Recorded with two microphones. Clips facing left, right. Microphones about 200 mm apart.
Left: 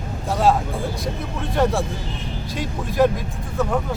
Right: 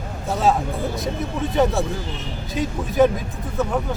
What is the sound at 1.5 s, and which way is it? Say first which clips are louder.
Speech: even; centre (ahead or behind).